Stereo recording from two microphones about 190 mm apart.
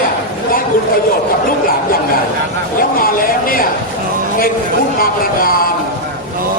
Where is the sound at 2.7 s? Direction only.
50° left (ahead or behind).